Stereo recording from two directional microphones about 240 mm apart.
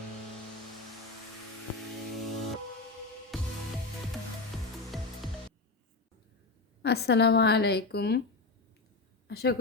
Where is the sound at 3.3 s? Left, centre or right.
Centre.